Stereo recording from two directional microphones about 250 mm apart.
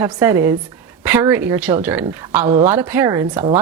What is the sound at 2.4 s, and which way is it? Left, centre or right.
Speech, right.